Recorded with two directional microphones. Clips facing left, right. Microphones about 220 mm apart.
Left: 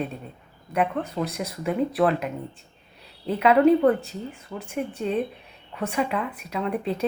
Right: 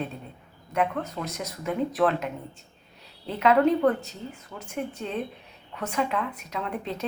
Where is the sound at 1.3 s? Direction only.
15° left (ahead or behind).